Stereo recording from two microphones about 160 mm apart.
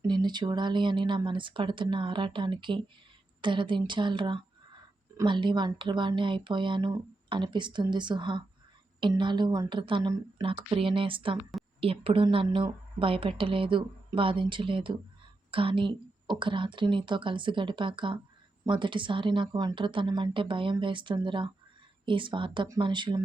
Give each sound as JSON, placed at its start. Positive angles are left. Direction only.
{"t": 0.1, "sound": "a woman's voice", "side_deg": -25}